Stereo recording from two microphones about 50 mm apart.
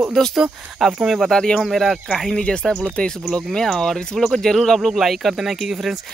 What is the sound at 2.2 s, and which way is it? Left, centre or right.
Speech, centre.